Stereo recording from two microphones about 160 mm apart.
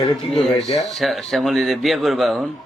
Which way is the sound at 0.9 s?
Centre (ahead or behind).